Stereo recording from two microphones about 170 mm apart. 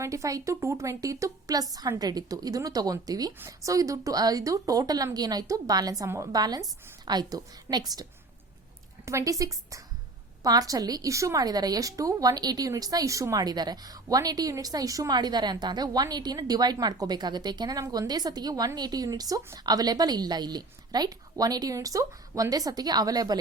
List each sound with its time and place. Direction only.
0.0 s a woman's voice: 20° right (ahead or behind)
9.0 s a woman's voice: 20° right (ahead or behind)